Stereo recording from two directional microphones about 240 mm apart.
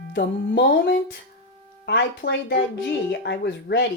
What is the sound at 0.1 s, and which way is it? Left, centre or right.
Speech, left.